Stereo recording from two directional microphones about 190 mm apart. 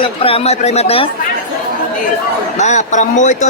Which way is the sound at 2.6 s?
40° left (ahead or behind).